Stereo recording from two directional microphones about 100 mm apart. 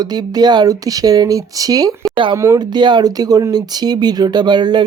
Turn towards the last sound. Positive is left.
turn(degrees=-45)  # may be behind; listen again after turning